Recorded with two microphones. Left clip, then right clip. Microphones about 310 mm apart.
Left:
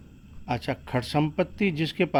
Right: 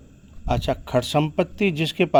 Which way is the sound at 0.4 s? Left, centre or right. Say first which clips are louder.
Right 6 dB; right.